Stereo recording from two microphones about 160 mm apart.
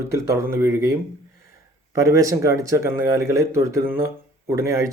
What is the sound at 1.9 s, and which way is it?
Speech, 20° right (ahead or behind).